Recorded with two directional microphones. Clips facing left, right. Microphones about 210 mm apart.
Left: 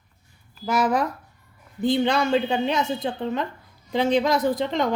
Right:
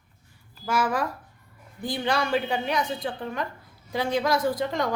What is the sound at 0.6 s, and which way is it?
Speech, 20° left (ahead or behind).